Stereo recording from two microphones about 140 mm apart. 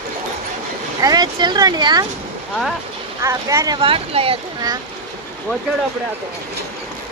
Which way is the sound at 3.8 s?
40° right (ahead or behind).